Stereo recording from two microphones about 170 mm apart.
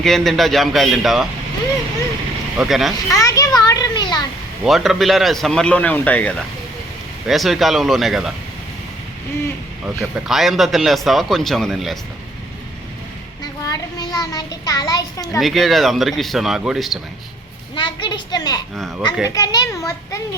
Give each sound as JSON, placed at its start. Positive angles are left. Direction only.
{"t": 0.0, "sound": "a man's voice", "side_deg": 0}
{"t": 2.6, "sound": "a man's voice", "side_deg": 0}
{"t": 3.1, "sound": "children playing", "side_deg": 20}
{"t": 4.6, "sound": "a man's voice", "side_deg": 0}
{"t": 10.0, "sound": "a man's voice", "side_deg": 0}
{"t": 13.4, "sound": "child singing", "side_deg": 20}
{"t": 15.4, "sound": "a man's voice", "side_deg": 0}
{"t": 17.7, "sound": "a sound", "side_deg": 30}
{"t": 19.3, "sound": "a child's voice", "side_deg": 25}